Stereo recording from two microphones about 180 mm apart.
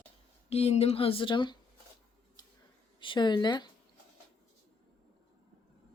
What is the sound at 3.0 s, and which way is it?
Speech, 25° left (ahead or behind).